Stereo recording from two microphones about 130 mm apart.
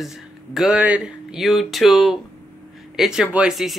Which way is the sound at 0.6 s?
10° right (ahead or behind).